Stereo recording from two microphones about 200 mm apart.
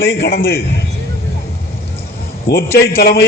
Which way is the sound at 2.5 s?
50° left (ahead or behind).